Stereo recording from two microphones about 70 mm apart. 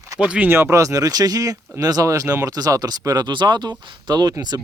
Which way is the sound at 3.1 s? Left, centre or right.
Right.